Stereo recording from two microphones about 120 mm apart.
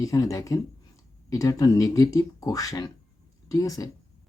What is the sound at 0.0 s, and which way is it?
Speech, 25° left (ahead or behind).